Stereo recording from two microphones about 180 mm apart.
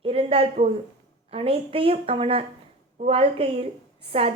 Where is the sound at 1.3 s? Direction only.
30° right (ahead or behind).